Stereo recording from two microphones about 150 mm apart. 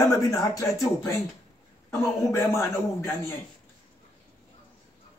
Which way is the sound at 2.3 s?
20° left (ahead or behind).